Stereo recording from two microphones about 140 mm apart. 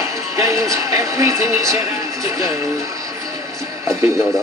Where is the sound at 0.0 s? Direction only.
20° right (ahead or behind).